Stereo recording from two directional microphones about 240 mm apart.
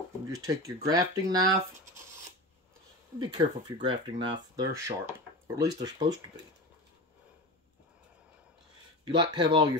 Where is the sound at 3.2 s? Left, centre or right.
Centre.